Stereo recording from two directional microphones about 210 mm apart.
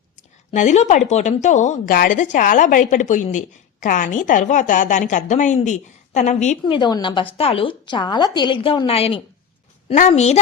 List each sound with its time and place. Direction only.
0.2 s a woman's voice: 35° left (ahead or behind)
6.7 s a woman's voice: 20° left (ahead or behind)